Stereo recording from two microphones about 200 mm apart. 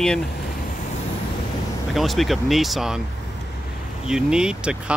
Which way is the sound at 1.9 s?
Centre (ahead or behind).